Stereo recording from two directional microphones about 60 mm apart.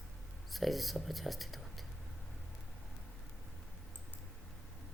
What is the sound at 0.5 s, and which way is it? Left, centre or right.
Speech, centre.